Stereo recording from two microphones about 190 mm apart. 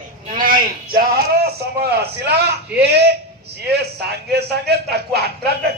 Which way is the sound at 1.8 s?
55° right (ahead or behind).